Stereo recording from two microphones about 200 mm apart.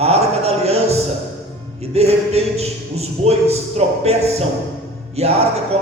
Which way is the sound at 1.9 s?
30° right (ahead or behind).